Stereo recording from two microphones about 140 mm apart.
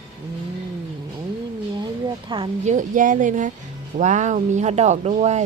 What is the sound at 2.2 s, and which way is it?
Speech, 40° right (ahead or behind).